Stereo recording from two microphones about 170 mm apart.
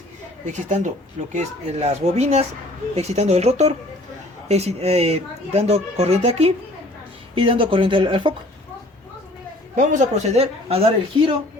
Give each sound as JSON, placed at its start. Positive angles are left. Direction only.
{"t": 0.4, "sound": "speech", "side_deg": -45}
{"t": 9.7, "sound": "speech", "side_deg": -45}